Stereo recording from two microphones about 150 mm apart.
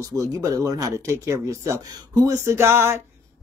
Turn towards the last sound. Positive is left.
turn(degrees=-15)  # may be behind; listen again after turning